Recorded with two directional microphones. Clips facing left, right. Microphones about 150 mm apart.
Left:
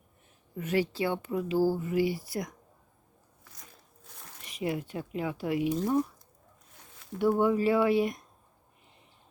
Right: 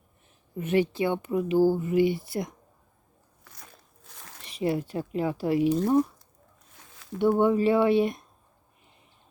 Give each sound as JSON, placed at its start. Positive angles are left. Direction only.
{"t": 0.5, "sound": "speech", "side_deg": -25}
{"t": 3.4, "sound": "biting", "side_deg": -70}
{"t": 4.4, "sound": "speech", "side_deg": -30}
{"t": 6.7, "sound": "a sound", "side_deg": -90}
{"t": 7.2, "sound": "speech", "side_deg": -25}